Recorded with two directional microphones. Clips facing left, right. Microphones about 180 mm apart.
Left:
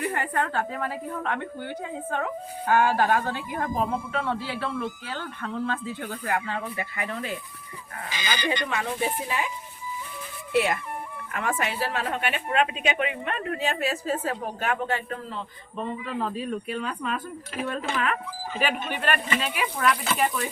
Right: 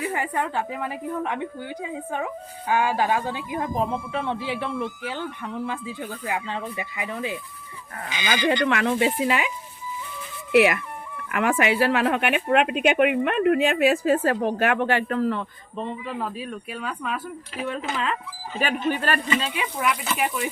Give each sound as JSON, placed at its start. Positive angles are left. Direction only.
{"t": 0.0, "sound": "a woman's voice", "side_deg": -10}
{"t": 8.3, "sound": "speech", "side_deg": -70}
{"t": 10.5, "sound": "a woman's voice", "side_deg": -85}
{"t": 16.0, "sound": "speech", "side_deg": -5}
{"t": 17.7, "sound": "speech", "side_deg": -25}
{"t": 18.6, "sound": "a man's voice", "side_deg": -40}
{"t": 19.5, "sound": "a woman's voice", "side_deg": -10}